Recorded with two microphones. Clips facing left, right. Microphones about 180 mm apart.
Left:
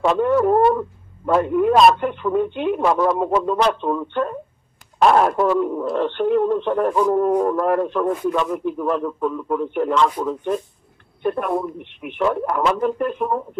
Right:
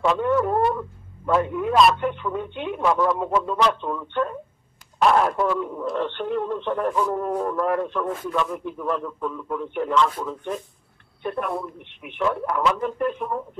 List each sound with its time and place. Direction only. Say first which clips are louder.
0.0 s speech: left 4 dB; 40° left (ahead or behind)